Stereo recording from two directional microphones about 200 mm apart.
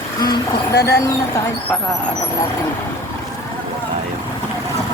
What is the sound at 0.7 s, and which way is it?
Speech, 55° left (ahead or behind).